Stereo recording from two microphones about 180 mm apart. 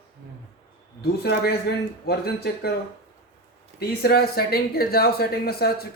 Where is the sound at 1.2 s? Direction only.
65° left (ahead or behind).